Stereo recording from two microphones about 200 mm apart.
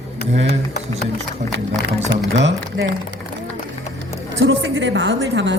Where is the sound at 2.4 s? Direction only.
60° right (ahead or behind).